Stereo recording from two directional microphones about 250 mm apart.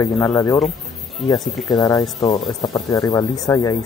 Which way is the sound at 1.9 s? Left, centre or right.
Centre.